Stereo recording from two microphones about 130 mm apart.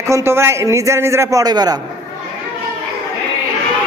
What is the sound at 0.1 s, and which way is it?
A man's voice, 20° right (ahead or behind).